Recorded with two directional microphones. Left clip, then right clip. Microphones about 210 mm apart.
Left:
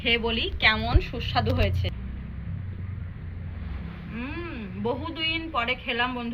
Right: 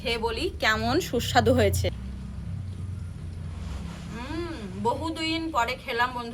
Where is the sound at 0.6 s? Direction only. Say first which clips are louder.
Left 1 dB; 65° right (ahead or behind).